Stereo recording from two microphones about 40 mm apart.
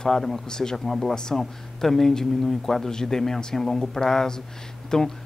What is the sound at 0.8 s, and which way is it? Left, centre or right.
Speech, centre.